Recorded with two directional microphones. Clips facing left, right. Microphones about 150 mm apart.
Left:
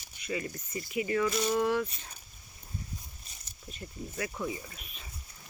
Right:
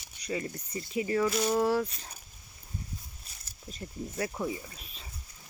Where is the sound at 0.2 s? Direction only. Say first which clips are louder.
Right 1 dB; 35° right (ahead or behind).